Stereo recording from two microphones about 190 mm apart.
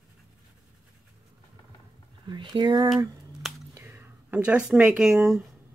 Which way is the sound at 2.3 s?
25° right (ahead or behind).